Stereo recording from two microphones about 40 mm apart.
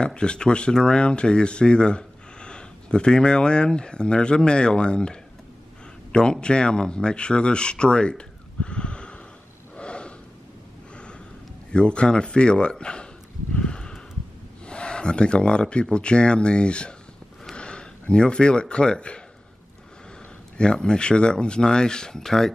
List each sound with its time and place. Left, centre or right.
0.0 s speech: left
8.6 s a sound: left
9.8 s gasp: left
11.7 s speech: left
13.6 s snort: left
14.7 s speech: left
20.5 s speech: left